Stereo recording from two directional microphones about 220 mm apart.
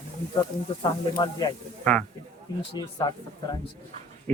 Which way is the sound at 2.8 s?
20° left (ahead or behind).